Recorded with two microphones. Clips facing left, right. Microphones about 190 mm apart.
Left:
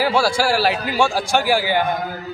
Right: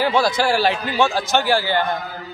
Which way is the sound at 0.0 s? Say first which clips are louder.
Even; 5° left (ahead or behind).